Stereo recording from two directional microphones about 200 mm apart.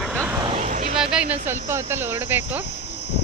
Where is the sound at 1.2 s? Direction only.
30° right (ahead or behind).